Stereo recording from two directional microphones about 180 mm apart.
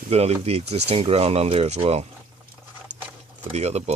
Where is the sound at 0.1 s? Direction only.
35° right (ahead or behind).